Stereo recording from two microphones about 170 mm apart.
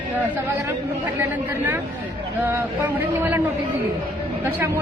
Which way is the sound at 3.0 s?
10° right (ahead or behind).